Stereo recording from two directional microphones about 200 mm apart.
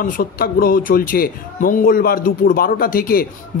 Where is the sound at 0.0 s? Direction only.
45° left (ahead or behind).